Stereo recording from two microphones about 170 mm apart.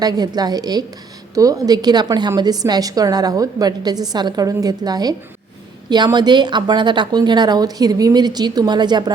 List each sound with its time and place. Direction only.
0.0 s a woman's voice: 25° right (ahead or behind)